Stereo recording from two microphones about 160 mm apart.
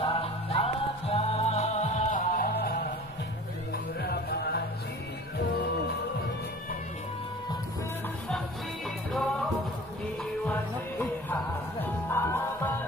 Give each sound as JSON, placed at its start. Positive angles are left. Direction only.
{"t": 0.0, "sound": "music", "side_deg": 35}
{"t": 3.7, "sound": "music", "side_deg": 80}
{"t": 10.4, "sound": "music", "side_deg": 10}